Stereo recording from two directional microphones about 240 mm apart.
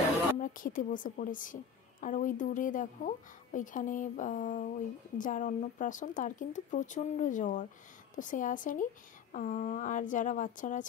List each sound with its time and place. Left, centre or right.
0.4 s a woman's voice: left